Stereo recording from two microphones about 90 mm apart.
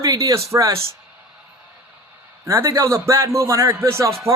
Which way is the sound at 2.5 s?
35° right (ahead or behind).